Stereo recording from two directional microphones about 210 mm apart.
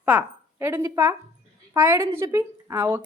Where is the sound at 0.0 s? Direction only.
5° right (ahead or behind).